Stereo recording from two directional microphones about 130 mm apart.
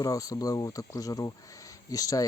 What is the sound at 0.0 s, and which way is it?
Speech, 25° left (ahead or behind).